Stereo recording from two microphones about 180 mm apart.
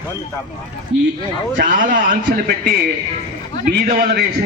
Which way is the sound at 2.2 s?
65° right (ahead or behind).